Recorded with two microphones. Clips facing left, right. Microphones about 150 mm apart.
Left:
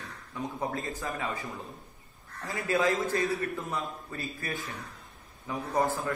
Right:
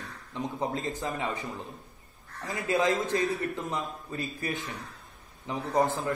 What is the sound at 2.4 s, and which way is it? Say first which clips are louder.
A man's voice: right 1 dB; 20° right (ahead or behind).